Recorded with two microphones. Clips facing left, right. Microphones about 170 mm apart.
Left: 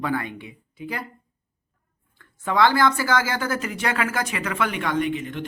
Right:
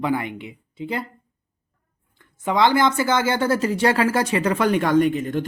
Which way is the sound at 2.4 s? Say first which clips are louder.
Right 1 dB; 20° right (ahead or behind).